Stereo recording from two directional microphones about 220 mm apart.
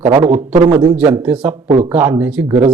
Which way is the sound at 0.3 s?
5° right (ahead or behind).